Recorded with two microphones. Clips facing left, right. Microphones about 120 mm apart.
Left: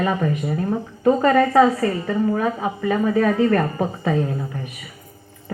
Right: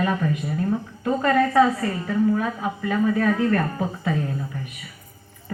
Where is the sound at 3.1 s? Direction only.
55° left (ahead or behind).